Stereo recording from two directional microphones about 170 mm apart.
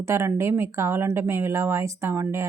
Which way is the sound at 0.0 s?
15° right (ahead or behind).